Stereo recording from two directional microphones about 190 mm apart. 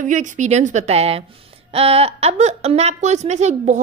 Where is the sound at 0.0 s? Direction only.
40° right (ahead or behind).